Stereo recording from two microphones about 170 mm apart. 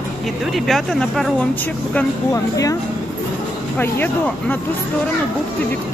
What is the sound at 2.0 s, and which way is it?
Speech, 20° left (ahead or behind).